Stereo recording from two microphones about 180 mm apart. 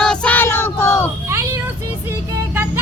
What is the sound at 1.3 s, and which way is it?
Vehicle, 15° right (ahead or behind).